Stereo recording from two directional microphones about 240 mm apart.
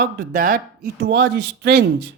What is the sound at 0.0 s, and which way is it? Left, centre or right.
Speech, right.